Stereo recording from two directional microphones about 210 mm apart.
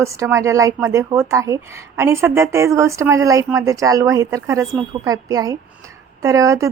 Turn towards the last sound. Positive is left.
turn(degrees=-15)  # may be behind; listen again after turning